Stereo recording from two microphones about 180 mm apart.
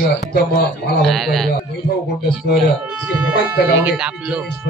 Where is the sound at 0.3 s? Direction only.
60° left (ahead or behind).